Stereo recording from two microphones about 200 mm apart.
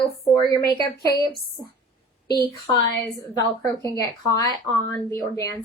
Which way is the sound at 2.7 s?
20° left (ahead or behind).